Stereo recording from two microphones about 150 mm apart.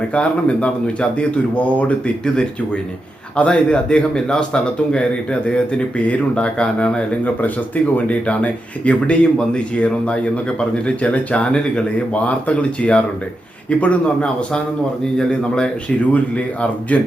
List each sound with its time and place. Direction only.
0.1 s a man's voice: 10° left (ahead or behind)